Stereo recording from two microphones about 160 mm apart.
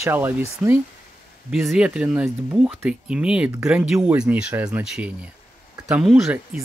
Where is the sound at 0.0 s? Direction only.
15° right (ahead or behind).